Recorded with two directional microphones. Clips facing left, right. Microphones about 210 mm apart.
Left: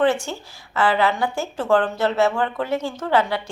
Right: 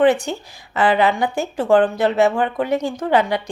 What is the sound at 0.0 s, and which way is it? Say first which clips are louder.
Speech: right 4 dB; 15° right (ahead or behind).